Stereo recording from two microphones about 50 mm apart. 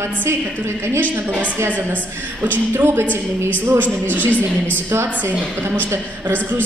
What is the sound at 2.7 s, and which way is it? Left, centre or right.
Speech, right.